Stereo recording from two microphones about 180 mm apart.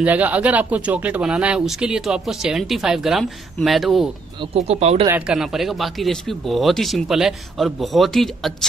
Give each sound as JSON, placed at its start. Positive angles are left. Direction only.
{"t": 0.0, "sound": "speech", "side_deg": -10}
{"t": 4.6, "sound": "speech", "side_deg": -35}
{"t": 5.0, "sound": "speech", "side_deg": -10}